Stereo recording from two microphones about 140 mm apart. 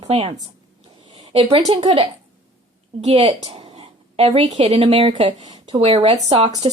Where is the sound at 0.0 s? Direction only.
45° right (ahead or behind).